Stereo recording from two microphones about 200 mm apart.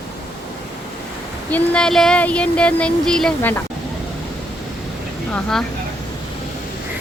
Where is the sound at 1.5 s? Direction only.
5° left (ahead or behind).